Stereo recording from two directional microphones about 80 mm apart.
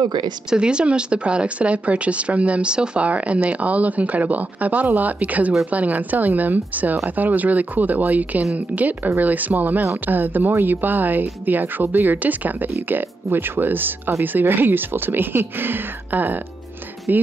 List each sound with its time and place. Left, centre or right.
0.0 s speech: right
0.5 s speech: centre